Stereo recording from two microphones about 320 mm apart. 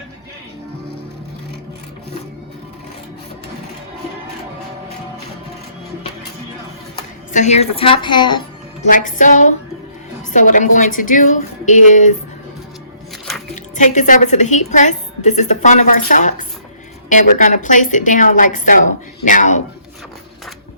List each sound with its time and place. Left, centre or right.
7.3 s a woman's voice: left
13.3 s a sound: centre
13.7 s a woman's voice: left